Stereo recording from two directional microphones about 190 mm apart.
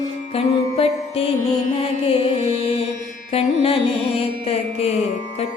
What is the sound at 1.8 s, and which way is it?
Music, 30° left (ahead or behind).